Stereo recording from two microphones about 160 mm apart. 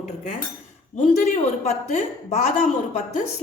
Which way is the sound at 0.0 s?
50° left (ahead or behind).